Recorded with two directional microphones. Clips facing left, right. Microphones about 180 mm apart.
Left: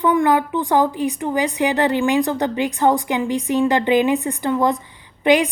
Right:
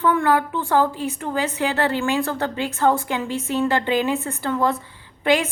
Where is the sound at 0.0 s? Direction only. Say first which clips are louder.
Left 3 dB; 15° left (ahead or behind).